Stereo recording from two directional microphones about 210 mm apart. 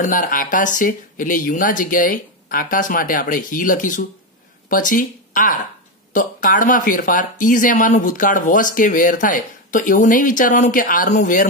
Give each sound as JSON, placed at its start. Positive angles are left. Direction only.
{"t": 0.0, "sound": "speech", "side_deg": 40}